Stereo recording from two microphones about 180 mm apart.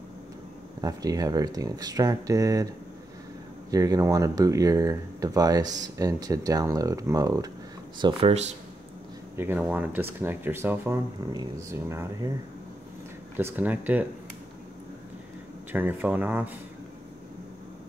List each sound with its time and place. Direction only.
0.7 s speech: 20° right (ahead or behind)
3.7 s speech: 20° right (ahead or behind)
8.0 s speech: 35° right (ahead or behind)
9.4 s speech: 10° right (ahead or behind)
13.4 s speech: 10° right (ahead or behind)
15.7 s speech: 10° right (ahead or behind)